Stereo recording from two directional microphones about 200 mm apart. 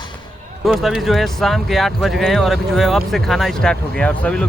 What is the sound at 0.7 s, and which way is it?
Speech, centre (ahead or behind).